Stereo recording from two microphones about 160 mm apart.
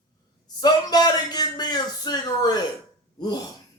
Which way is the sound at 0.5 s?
25° left (ahead or behind).